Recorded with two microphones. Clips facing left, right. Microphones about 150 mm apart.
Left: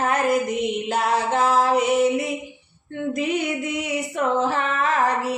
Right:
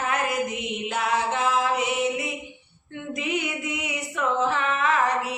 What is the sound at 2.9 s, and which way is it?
Female singing, 40° left (ahead or behind).